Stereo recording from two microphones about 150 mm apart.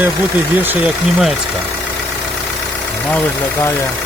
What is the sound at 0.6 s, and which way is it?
Speech, 5° right (ahead or behind).